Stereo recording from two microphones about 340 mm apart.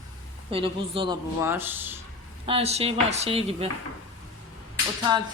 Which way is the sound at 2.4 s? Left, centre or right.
Centre.